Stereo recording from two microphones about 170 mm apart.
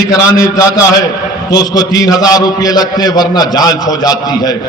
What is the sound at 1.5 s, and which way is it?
A man's voice, 20° left (ahead or behind).